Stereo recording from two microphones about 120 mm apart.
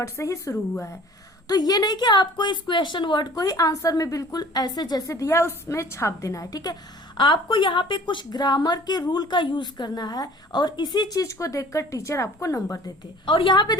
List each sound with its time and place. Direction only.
0.0 s a woman's voice: 25° left (ahead or behind)
13.2 s a woman's voice: 45° left (ahead or behind)